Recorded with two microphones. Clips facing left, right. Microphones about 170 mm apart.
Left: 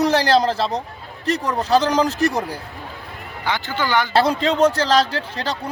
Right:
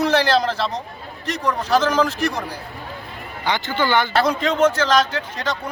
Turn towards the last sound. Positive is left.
turn(degrees=35)  # may be behind; listen again after turning